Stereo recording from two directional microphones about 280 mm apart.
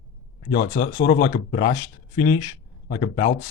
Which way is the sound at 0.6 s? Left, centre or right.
Left.